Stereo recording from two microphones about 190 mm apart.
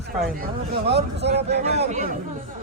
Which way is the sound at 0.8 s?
60° right (ahead or behind).